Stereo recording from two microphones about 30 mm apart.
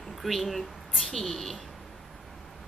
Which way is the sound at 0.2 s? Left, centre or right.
Centre.